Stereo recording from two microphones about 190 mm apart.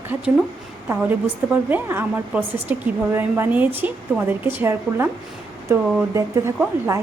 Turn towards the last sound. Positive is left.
turn(degrees=-15)  # may be behind; listen again after turning